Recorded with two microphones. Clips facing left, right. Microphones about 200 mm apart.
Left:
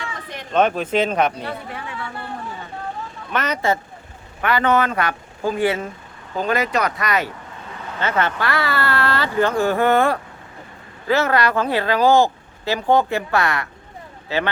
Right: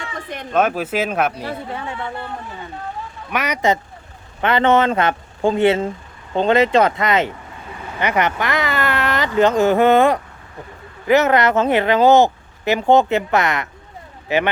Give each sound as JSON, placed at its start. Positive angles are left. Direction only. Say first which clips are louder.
{"t": 0.5, "sound": "speech", "louder": "left 1 dB", "side_deg": -5}
{"t": 1.5, "sound": "speech", "louder": "right 3 dB", "side_deg": -25}
{"t": 3.3, "sound": "speech", "louder": "right 2 dB", "side_deg": -10}